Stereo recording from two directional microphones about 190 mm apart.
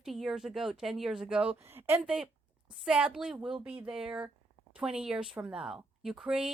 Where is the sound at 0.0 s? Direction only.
Centre (ahead or behind).